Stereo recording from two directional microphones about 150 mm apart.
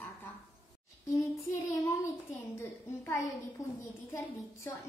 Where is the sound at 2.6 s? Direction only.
20° left (ahead or behind).